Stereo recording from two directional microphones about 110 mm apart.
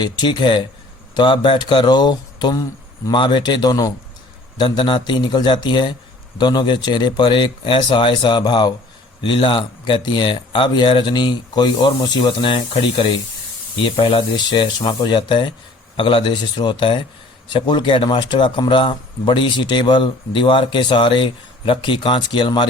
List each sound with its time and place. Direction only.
0.0 s a man's voice: 40° left (ahead or behind)